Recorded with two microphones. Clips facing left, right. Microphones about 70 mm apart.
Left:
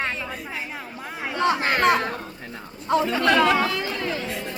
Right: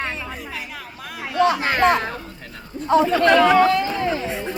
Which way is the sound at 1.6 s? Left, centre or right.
Right.